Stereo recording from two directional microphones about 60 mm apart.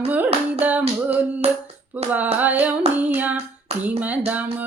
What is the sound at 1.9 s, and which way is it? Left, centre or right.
Female singing, right.